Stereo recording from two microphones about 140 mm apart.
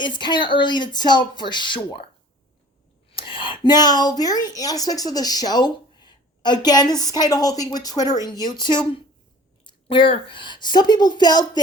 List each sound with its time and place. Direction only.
0.0 s speech: 35° left (ahead or behind)
3.1 s a woman's voice: 40° left (ahead or behind)